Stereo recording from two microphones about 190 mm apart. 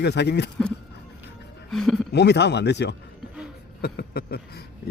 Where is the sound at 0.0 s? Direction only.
60° left (ahead or behind).